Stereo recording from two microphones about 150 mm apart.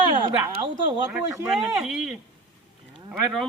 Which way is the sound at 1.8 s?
Centre (ahead or behind).